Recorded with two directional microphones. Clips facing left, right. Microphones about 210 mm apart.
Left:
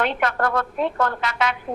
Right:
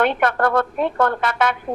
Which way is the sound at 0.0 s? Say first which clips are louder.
Right 4 dB; 55° right (ahead or behind).